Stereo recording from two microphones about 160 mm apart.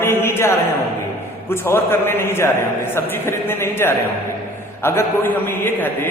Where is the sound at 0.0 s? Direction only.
15° left (ahead or behind).